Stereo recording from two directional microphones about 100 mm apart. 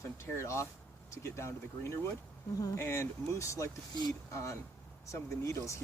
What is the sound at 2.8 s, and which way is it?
Speech, 25° left (ahead or behind).